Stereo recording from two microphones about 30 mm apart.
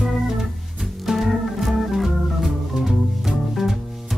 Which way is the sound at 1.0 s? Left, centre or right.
Centre.